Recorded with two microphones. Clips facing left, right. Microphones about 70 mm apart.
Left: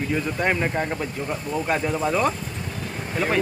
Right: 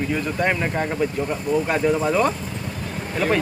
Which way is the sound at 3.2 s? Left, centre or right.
Centre.